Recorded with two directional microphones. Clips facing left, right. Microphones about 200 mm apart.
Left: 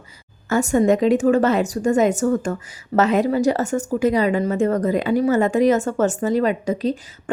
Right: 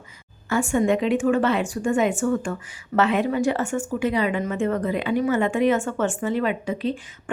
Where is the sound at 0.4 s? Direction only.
40° left (ahead or behind).